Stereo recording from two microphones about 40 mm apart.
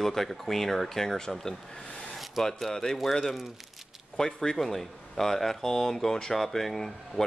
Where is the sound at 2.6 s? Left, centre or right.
Centre.